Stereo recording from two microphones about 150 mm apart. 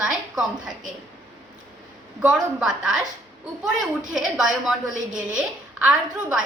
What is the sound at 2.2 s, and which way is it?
A woman's voice, 5° right (ahead or behind).